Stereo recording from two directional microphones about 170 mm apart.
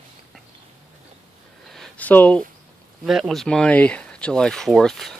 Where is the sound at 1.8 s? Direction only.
10° left (ahead or behind).